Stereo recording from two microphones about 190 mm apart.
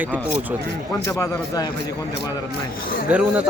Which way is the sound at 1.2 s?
20° left (ahead or behind).